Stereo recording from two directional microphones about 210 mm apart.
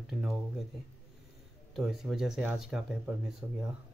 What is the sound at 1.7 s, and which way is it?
Speech, centre (ahead or behind).